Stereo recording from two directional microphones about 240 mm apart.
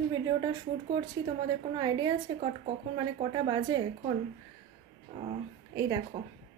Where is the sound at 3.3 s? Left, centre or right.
Centre.